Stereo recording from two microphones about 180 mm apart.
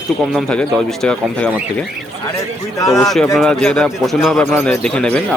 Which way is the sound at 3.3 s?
5° left (ahead or behind).